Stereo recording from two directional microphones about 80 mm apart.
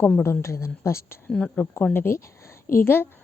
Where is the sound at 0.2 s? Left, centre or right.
Left.